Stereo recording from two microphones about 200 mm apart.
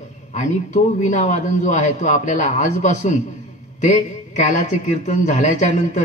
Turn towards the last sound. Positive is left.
turn(degrees=40)  # may be behind; listen again after turning